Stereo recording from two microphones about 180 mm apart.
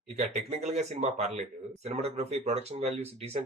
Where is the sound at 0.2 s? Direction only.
40° right (ahead or behind).